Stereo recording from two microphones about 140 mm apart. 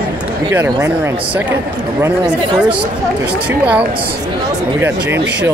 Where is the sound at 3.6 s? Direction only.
10° right (ahead or behind).